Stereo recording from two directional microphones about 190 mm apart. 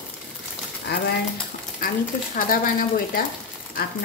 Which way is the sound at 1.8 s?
50° left (ahead or behind).